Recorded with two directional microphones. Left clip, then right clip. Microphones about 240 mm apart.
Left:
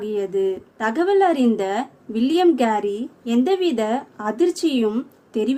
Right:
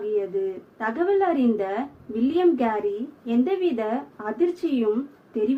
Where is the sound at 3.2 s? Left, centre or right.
Left.